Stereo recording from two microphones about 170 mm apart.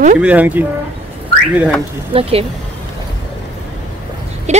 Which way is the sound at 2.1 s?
30° right (ahead or behind).